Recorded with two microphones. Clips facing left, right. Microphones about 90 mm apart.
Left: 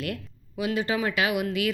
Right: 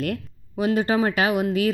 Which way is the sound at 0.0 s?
45° right (ahead or behind).